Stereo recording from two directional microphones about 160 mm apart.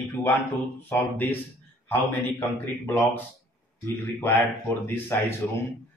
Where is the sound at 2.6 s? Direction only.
10° left (ahead or behind).